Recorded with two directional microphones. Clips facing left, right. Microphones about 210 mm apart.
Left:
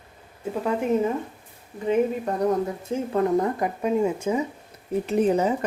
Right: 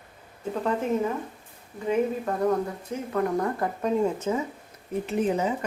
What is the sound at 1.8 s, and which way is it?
Speech, 20° left (ahead or behind).